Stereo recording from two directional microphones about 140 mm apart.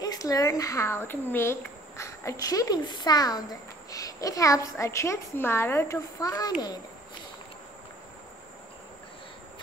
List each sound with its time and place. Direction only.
0.0 s speech: 25° left (ahead or behind)